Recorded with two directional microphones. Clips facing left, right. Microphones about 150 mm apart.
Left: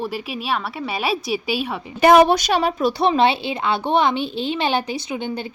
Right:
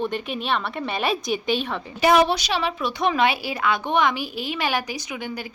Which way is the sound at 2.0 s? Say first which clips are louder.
Left 5 dB; 50° left (ahead or behind).